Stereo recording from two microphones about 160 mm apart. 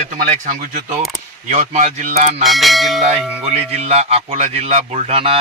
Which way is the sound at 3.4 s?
40° right (ahead or behind).